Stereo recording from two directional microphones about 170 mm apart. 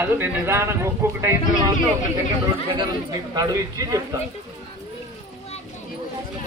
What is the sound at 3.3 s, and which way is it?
Speech, 20° right (ahead or behind).